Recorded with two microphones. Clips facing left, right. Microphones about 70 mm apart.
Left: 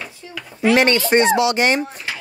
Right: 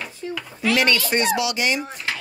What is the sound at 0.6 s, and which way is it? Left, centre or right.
Speech, left.